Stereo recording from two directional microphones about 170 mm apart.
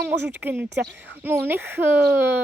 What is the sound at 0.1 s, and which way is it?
Speech, 10° right (ahead or behind).